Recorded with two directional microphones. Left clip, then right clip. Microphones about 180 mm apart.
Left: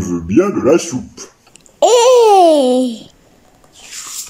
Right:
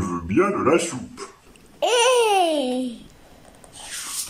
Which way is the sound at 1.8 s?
25° left (ahead or behind).